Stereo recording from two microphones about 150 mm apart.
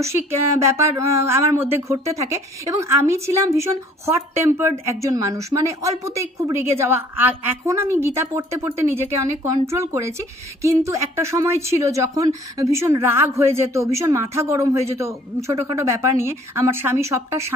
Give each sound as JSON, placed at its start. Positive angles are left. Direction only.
{"t": 0.7, "sound": "speech", "side_deg": -20}